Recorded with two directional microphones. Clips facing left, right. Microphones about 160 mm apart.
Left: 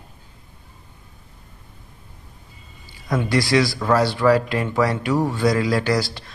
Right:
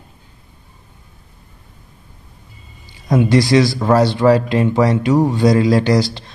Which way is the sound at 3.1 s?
20° right (ahead or behind).